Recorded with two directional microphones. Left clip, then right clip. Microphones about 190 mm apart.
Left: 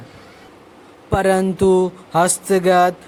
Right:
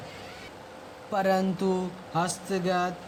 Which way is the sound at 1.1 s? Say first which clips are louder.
Left 9 dB; 35° left (ahead or behind).